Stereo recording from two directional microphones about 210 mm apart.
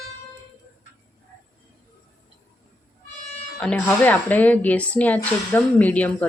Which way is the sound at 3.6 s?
5° left (ahead or behind).